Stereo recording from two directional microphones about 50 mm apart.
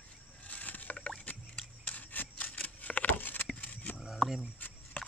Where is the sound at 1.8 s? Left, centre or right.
Left.